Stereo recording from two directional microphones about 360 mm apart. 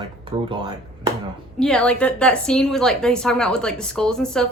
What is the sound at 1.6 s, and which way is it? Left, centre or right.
A woman's voice, centre.